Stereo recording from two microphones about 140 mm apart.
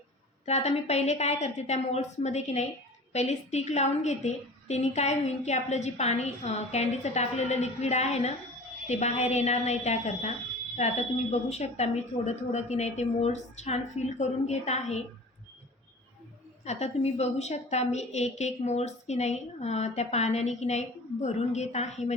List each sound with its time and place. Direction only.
0.4 s a woman's voice: 50° left (ahead or behind)
16.6 s a woman's voice: 50° left (ahead or behind)